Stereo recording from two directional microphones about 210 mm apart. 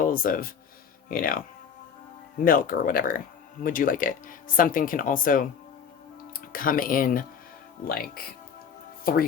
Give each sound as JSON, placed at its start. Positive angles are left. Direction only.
{"t": 0.0, "sound": "speech", "side_deg": 40}